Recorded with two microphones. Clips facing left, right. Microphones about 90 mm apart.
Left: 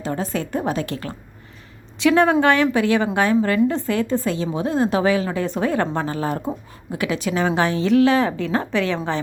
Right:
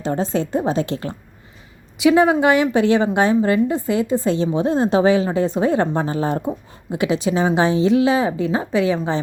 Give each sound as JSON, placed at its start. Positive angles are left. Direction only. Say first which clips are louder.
{"t": 0.0, "sound": "a woman's voice", "louder": "right 4 dB", "side_deg": -25}
{"t": 2.0, "sound": "a woman's voice", "louder": "right 2 dB", "side_deg": -15}
{"t": 4.3, "sound": "a woman's voice", "louder": "right 4 dB", "side_deg": -25}